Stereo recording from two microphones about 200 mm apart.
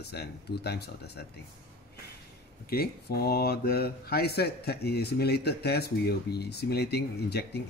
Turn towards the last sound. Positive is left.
turn(degrees=55)  # may be behind; listen again after turning